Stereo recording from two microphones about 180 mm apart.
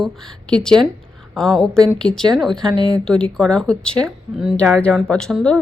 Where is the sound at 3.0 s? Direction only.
5° left (ahead or behind).